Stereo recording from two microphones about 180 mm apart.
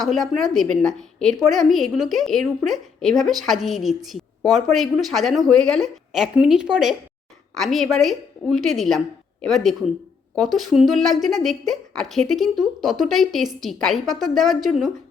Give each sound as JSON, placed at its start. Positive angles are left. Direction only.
{"t": 0.0, "sound": "a woman's voice", "side_deg": 0}